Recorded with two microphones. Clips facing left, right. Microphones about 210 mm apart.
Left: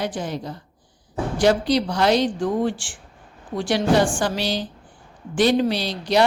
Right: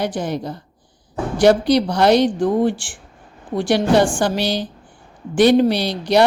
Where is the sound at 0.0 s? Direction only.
65° right (ahead or behind).